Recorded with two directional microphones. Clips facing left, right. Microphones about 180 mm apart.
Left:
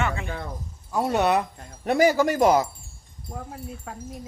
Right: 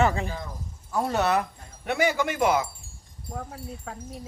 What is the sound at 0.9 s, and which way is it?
Speech, 15° left (ahead or behind).